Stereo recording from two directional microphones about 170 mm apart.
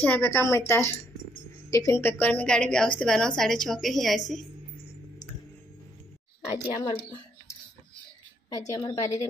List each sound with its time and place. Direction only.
0.0 s a woman's voice: 10° left (ahead or behind)
6.6 s a woman's voice: 25° left (ahead or behind)
8.5 s a woman's voice: 25° left (ahead or behind)